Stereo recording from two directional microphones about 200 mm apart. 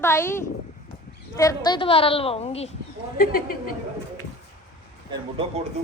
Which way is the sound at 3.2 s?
45° left (ahead or behind).